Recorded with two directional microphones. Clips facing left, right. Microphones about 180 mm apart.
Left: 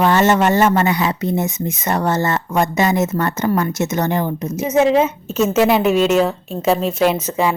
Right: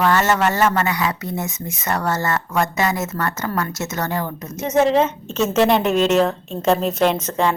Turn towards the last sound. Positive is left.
turn(degrees=5)  # may be behind; listen again after turning